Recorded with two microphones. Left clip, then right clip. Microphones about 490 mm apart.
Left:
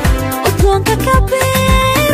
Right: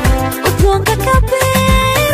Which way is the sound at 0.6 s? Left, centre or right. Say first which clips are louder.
Even; right.